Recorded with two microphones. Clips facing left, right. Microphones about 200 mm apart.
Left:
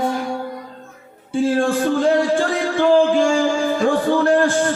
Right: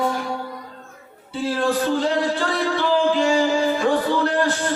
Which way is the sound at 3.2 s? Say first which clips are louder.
Left 2 dB; 50° left (ahead or behind).